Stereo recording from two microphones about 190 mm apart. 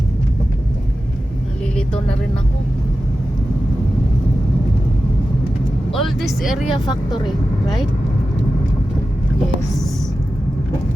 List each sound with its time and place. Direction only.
1.7 s vehicle: 5° left (ahead or behind)
5.9 s speech: centre (ahead or behind)
6.8 s speech: 25° left (ahead or behind)